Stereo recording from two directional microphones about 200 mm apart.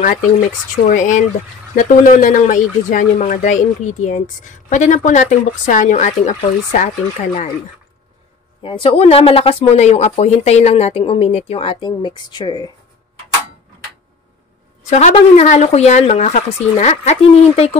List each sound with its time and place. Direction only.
0.8 s speech: 40° left (ahead or behind)
8.6 s speech: 25° left (ahead or behind)
14.9 s speech: 35° left (ahead or behind)